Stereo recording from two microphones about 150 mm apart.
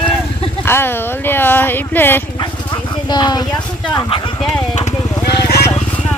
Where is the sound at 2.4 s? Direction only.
30° left (ahead or behind).